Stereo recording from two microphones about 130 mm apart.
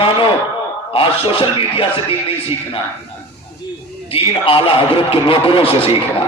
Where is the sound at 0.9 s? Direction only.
45° left (ahead or behind).